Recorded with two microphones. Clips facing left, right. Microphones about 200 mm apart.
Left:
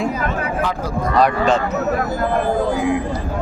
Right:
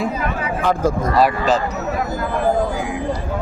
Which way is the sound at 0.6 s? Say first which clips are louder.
Right 5 dB; 45° right (ahead or behind).